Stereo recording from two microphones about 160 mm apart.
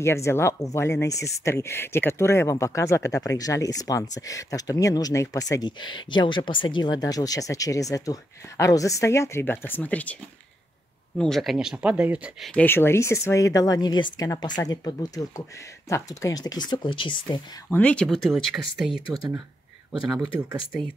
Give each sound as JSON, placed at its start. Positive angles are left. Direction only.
{"t": 0.0, "sound": "speech", "side_deg": 15}
{"t": 11.1, "sound": "speech", "side_deg": 0}
{"t": 12.5, "sound": "speech", "side_deg": 15}
{"t": 17.6, "sound": "speech", "side_deg": 10}
{"t": 19.1, "sound": "speech", "side_deg": -25}